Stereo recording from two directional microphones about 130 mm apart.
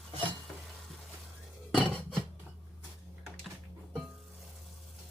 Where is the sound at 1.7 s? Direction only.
10° left (ahead or behind).